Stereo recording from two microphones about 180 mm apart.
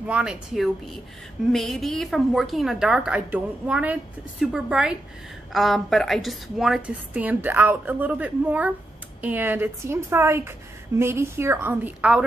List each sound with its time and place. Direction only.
0.0 s a woman's voice: 5° right (ahead or behind)